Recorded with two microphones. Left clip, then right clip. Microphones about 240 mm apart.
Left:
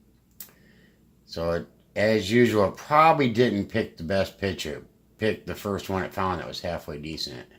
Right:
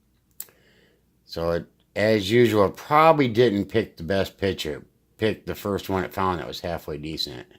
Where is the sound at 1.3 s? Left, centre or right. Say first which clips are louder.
Right 2 dB; right.